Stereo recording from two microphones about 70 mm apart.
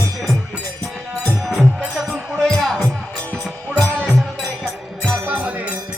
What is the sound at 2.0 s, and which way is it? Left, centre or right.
Music, centre.